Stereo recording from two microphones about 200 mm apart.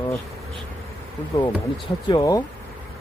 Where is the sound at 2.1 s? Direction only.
20° left (ahead or behind).